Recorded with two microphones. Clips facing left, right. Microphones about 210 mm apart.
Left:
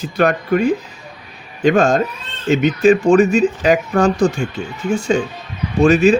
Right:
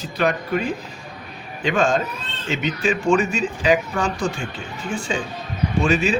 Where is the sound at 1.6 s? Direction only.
45° left (ahead or behind).